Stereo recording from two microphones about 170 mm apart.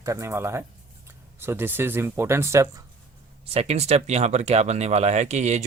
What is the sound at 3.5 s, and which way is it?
Speech, 40° right (ahead or behind).